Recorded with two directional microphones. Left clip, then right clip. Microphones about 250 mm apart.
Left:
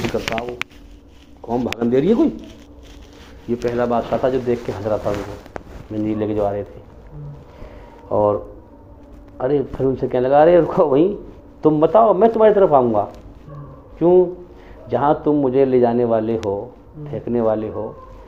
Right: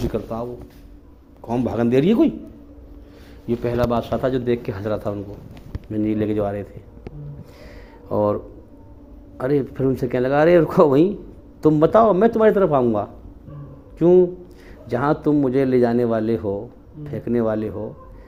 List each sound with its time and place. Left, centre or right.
1.5 s speech: right
3.6 s speech: right
6.0 s speech: right
8.1 s speech: right
9.4 s speech: right